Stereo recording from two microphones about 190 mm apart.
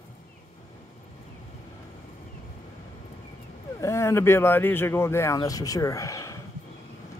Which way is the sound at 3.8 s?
15° left (ahead or behind).